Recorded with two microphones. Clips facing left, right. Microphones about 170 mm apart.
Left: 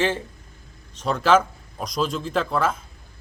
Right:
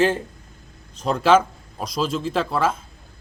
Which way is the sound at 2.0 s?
5° right (ahead or behind).